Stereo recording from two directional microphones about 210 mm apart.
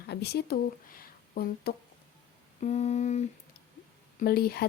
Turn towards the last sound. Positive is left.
turn(degrees=50)  # may be behind; listen again after turning